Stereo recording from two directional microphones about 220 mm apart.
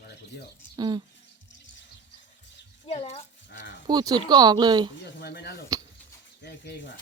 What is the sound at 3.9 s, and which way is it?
Speech, 20° right (ahead or behind).